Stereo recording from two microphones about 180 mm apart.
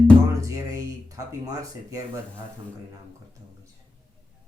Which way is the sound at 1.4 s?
20° right (ahead or behind).